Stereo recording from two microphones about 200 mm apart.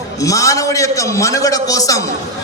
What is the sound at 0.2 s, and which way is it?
A man's voice, 15° left (ahead or behind).